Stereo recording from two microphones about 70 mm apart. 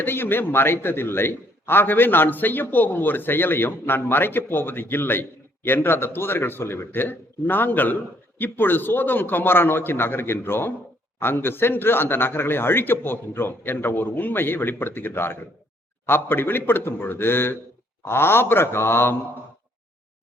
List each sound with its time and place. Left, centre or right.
0.0 s a man's voice: left